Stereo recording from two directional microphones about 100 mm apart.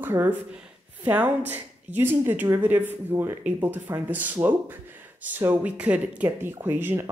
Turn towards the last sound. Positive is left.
turn(degrees=-20)  # may be behind; listen again after turning